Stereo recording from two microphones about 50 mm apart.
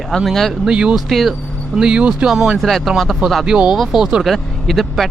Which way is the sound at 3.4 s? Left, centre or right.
Centre.